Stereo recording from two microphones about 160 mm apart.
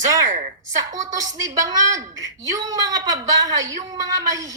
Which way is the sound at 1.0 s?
20° right (ahead or behind).